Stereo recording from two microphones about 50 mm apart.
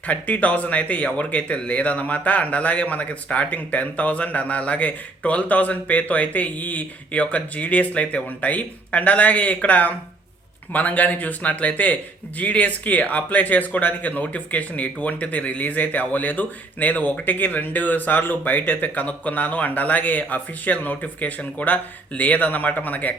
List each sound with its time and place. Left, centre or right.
0.1 s speech: left